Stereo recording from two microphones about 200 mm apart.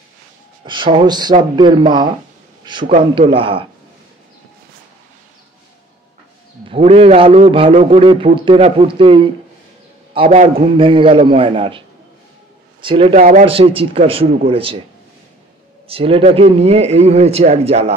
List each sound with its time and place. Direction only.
0.7 s a man's voice: 25° right (ahead or behind)
2.6 s a sound: 25° right (ahead or behind)
3.0 s a man's voice: 25° right (ahead or behind)
6.7 s a man's voice: 30° right (ahead or behind)
12.8 s a man's voice: 30° right (ahead or behind)
13.5 s a man's voice: 30° right (ahead or behind)
15.9 s a man's voice: 30° right (ahead or behind)